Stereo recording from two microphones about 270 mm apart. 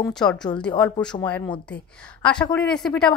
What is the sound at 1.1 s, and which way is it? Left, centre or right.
Speech, left.